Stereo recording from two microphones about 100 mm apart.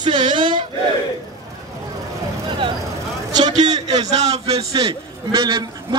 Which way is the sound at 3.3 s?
45° right (ahead or behind).